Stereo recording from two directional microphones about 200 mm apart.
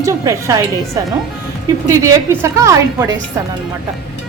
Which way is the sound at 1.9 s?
15° right (ahead or behind).